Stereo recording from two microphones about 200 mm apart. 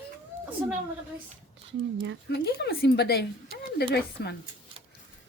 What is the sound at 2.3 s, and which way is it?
A woman's voice, 55° left (ahead or behind).